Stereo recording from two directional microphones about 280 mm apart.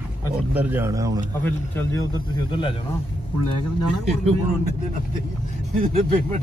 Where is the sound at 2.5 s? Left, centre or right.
Centre.